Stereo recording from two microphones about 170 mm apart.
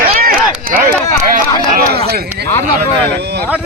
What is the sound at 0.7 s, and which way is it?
Speech, 60° right (ahead or behind).